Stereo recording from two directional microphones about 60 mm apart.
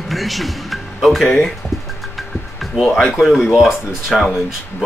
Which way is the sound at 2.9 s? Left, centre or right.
Centre.